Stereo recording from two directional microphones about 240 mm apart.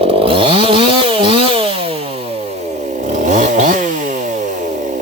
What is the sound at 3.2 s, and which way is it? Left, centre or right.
Chainsaw, right.